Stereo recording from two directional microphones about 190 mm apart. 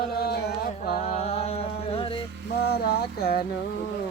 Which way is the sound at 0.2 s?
60° left (ahead or behind).